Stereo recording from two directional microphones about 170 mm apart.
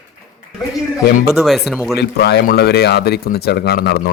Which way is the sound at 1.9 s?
75° left (ahead or behind).